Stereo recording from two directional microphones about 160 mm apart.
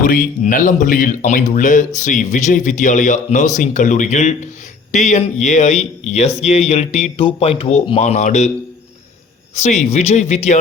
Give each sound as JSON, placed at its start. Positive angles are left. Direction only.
{"t": 0.0, "sound": "speech", "side_deg": 60}
{"t": 9.6, "sound": "speech", "side_deg": 45}